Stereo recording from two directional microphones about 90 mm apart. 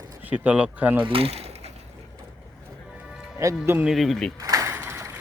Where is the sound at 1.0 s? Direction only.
90° right.